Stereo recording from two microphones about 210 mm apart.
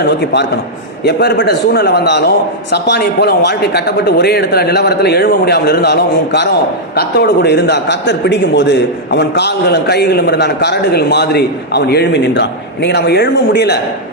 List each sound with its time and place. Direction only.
1.0 s a man's voice: 55° left (ahead or behind)